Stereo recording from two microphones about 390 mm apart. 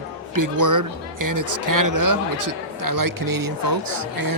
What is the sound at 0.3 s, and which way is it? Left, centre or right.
Speech, right.